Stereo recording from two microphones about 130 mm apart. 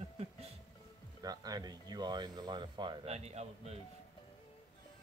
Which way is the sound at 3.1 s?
55° right (ahead or behind).